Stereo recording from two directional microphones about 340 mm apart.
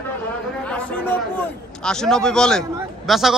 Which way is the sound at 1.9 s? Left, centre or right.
Centre.